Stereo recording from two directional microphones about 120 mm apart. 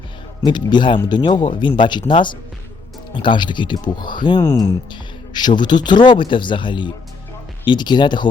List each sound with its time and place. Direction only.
0.4 s speech: 40° left (ahead or behind)
4.4 s speech: 25° left (ahead or behind)